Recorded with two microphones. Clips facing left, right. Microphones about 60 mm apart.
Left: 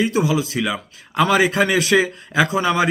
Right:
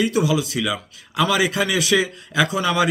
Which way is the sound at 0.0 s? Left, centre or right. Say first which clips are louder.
Left 1 dB; left.